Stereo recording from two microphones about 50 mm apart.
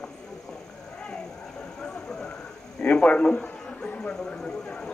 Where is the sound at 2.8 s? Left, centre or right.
Left.